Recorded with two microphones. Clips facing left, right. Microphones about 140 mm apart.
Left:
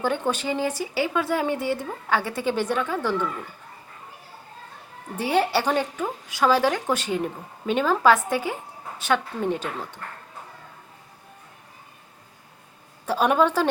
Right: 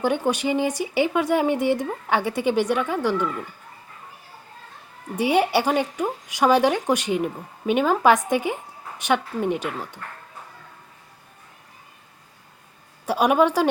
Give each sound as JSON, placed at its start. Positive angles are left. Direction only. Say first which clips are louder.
{"t": 0.0, "sound": "speech", "louder": "right 3 dB", "side_deg": -15}
{"t": 5.1, "sound": "speech", "louder": "right 3 dB", "side_deg": -15}
{"t": 13.1, "sound": "speech", "louder": "right 2 dB", "side_deg": -10}